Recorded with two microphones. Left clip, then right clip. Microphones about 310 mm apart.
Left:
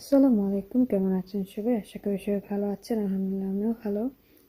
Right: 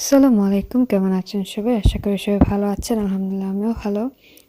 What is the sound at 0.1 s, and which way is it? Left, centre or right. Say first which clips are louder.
Speech: right 7 dB; right.